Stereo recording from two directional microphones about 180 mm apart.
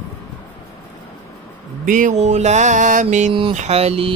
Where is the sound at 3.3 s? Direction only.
30° right (ahead or behind).